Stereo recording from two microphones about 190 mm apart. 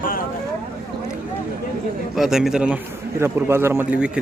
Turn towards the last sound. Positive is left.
turn(degrees=-5)  # may be behind; listen again after turning